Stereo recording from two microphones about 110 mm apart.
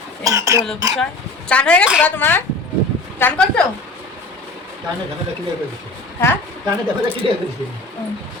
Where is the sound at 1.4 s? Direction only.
10° left (ahead or behind).